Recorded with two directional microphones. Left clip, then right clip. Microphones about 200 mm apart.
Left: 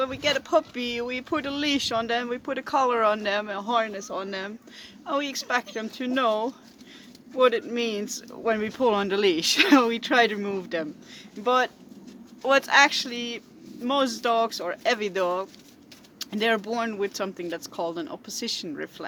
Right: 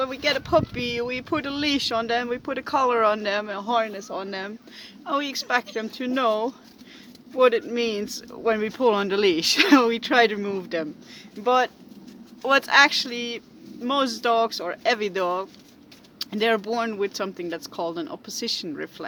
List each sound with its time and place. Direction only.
0.0 s speech: 15° right (ahead or behind)